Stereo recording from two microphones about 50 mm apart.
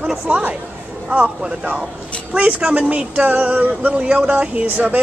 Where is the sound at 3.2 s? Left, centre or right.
Right.